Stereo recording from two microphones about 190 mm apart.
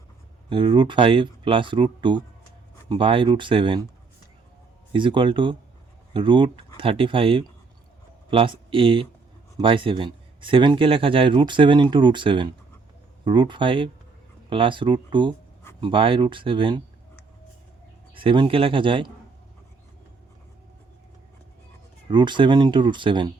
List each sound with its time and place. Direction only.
0.5 s a man's voice: 25° right (ahead or behind)
4.9 s a man's voice: 25° right (ahead or behind)
18.1 s a man's voice: 25° right (ahead or behind)
22.1 s a man's voice: 25° right (ahead or behind)